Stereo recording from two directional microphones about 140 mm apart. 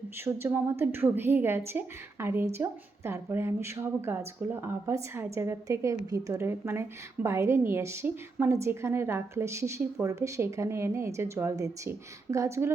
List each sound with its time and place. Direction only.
0.3 s a woman's voice: 15° right (ahead or behind)